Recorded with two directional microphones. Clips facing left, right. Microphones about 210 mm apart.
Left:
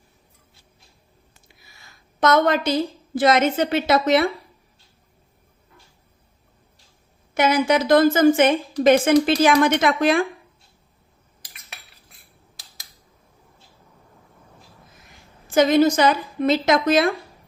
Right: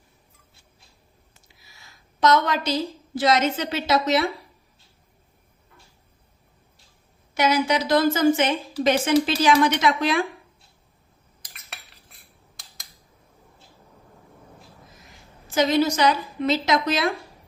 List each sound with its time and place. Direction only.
2.2 s a woman's voice: 55° left (ahead or behind)
7.3 s a woman's voice: 55° left (ahead or behind)
15.4 s a woman's voice: 50° left (ahead or behind)